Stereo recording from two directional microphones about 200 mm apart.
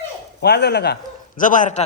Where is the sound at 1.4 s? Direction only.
40° left (ahead or behind).